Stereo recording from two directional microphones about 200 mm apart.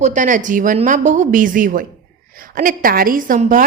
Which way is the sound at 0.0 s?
40° right (ahead or behind).